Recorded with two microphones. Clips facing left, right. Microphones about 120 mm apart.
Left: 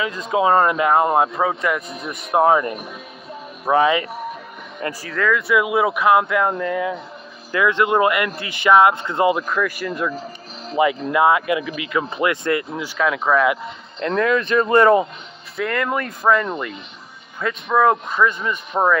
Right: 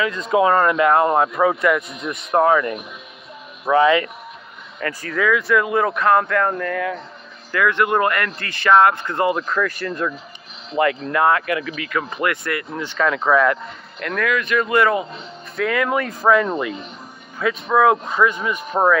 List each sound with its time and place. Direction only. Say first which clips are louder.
0.3 s speech: even; 20° left (ahead or behind)
1.8 s speech: right 1 dB; 35° left (ahead or behind)
2.4 s speech: left 1 dB; 25° left (ahead or behind)
3.7 s speech: right 2 dB; 20° left (ahead or behind)
5.0 s speech: right 1 dB; centre (ahead or behind); by 12.6 s 20° left (ahead or behind)
12.7 s speech: even; 5° left (ahead or behind)
13.9 s speech: left 3 dB; 30° left (ahead or behind)
15.5 s speech: right 2 dB; centre (ahead or behind)